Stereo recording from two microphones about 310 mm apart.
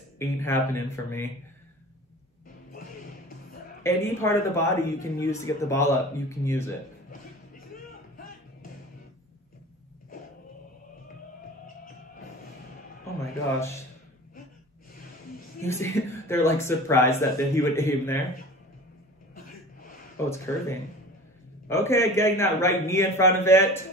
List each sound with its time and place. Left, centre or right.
0.2 s a man's voice: centre
3.8 s a man's voice: centre
11.6 s music: left
13.0 s a sound: centre
15.6 s a man's voice: centre
19.3 s a sound: left
20.2 s a man's voice: centre